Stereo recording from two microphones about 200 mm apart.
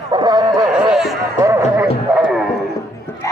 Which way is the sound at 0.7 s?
5° right (ahead or behind).